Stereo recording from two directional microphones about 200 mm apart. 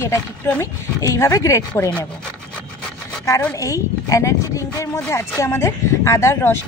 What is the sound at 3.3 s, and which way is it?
Speech, 10° left (ahead or behind).